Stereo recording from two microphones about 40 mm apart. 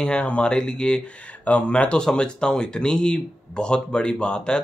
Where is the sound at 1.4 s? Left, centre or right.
Left.